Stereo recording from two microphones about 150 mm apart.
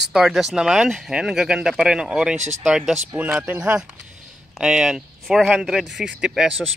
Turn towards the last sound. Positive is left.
turn(degrees=-5)  # may be behind; listen again after turning